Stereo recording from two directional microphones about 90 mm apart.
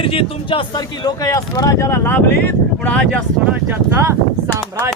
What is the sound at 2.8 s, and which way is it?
Speech, 15° left (ahead or behind).